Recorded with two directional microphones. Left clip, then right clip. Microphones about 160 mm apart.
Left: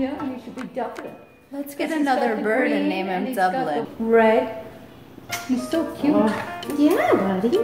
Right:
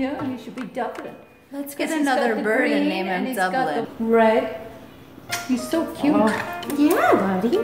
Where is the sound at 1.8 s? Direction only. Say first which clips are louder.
Even; 15° left (ahead or behind).